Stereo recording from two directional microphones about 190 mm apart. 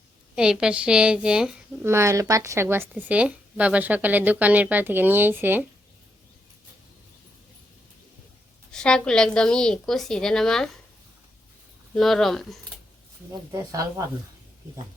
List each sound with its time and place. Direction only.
0.3 s a woman's voice: 5° right (ahead or behind)
1.9 s speech: 15° right (ahead or behind)
8.7 s a woman's voice: 5° left (ahead or behind)
11.9 s a woman's voice: centre (ahead or behind)
13.5 s speech: 15° right (ahead or behind)